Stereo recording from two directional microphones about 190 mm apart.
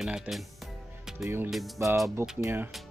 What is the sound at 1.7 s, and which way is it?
Speech, 15° right (ahead or behind).